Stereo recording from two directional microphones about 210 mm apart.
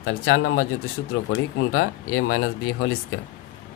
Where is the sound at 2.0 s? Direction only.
90° left.